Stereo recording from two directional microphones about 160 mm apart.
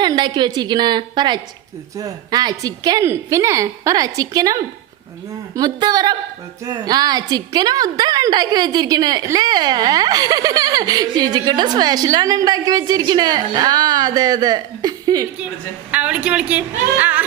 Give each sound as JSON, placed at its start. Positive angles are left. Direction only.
{"t": 0.0, "sound": "a woman's voice", "side_deg": -25}
{"t": 15.9, "sound": "a woman's voice", "side_deg": -10}